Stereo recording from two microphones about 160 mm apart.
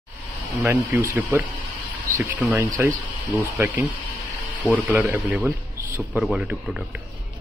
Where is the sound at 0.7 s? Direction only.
15° right (ahead or behind).